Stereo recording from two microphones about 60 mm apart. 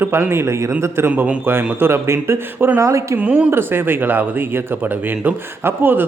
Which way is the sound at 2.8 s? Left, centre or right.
Right.